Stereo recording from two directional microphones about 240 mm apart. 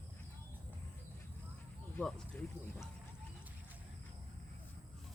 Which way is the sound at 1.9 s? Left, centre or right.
Centre.